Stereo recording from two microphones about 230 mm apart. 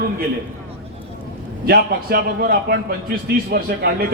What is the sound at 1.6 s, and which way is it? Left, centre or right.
A man's voice, right.